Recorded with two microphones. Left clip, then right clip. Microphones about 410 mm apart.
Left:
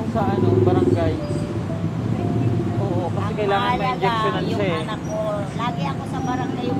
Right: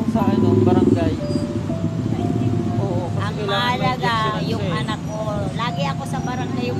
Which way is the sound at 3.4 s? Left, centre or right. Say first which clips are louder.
Even; right.